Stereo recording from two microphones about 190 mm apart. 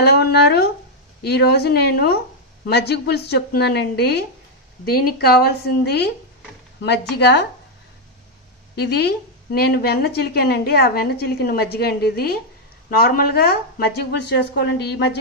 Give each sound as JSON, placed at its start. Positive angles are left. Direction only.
{"t": 0.0, "sound": "a woman's voice", "side_deg": 60}
{"t": 8.7, "sound": "a woman's voice", "side_deg": 60}